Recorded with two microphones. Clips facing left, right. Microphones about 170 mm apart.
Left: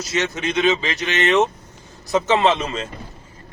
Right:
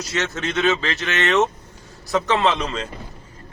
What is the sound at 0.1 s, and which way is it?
Speech, 15° left (ahead or behind).